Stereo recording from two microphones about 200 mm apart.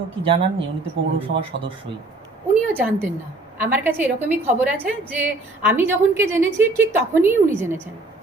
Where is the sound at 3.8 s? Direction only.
10° right (ahead or behind).